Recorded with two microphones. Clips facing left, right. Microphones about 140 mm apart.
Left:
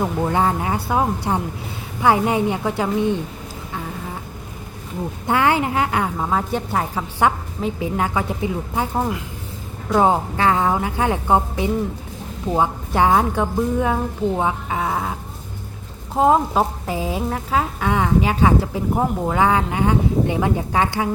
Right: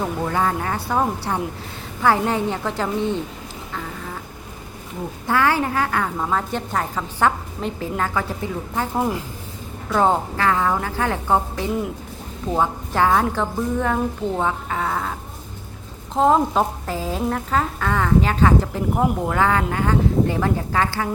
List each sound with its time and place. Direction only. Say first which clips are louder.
0.0 s a woman's voice: left 3 dB; 20° left (ahead or behind)
5.2 s a woman's voice: left 1 dB; 20° left (ahead or behind)
9.9 s a woman's voice: left 2 dB; 15° left (ahead or behind)
16.1 s a woman's voice: left 1 dB; 10° left (ahead or behind)
18.9 s speech: right 1 dB; 5° right (ahead or behind)
19.3 s a woman's voice: left 2 dB; 15° left (ahead or behind)